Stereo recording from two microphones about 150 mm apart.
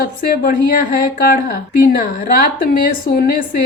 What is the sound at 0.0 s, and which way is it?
Speech, 75° left (ahead or behind).